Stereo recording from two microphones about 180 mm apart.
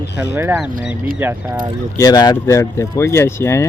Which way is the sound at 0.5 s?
5° right (ahead or behind).